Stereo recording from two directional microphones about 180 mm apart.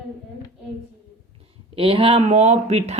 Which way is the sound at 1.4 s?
30° right (ahead or behind).